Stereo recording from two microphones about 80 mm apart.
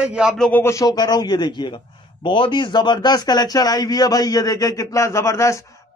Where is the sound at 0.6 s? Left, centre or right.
Left.